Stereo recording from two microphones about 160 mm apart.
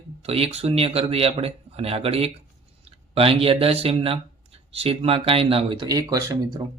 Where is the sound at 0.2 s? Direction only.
40° right (ahead or behind).